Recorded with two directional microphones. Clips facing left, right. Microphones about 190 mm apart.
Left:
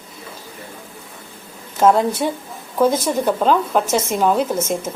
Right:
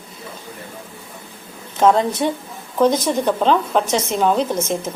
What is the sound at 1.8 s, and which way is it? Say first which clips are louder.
A woman's voice: even; 5° left (ahead or behind).